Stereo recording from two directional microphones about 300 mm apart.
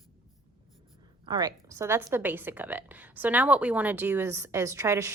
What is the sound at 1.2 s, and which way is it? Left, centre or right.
A woman's voice, centre.